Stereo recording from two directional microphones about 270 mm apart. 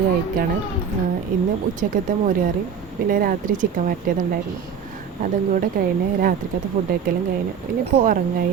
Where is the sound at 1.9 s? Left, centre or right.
Right.